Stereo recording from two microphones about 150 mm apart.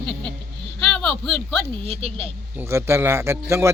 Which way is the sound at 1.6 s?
40° right (ahead or behind).